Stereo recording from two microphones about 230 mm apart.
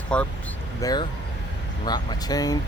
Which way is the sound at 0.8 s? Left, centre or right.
Centre.